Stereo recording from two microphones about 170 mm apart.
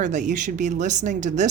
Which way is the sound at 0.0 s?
45° right (ahead or behind).